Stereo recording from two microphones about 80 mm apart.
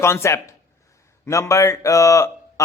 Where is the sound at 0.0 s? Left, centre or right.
Left.